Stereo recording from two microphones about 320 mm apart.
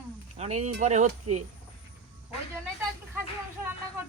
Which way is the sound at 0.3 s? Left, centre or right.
Centre.